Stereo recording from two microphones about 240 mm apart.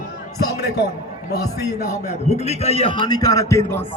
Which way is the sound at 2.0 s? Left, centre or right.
Left.